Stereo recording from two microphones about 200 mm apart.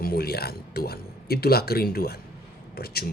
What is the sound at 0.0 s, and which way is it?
Speech, 50° left (ahead or behind).